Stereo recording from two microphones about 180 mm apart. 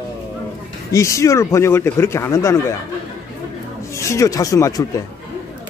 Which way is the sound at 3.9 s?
15° left (ahead or behind).